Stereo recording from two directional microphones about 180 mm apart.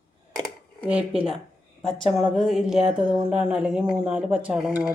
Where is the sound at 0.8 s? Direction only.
5° right (ahead or behind).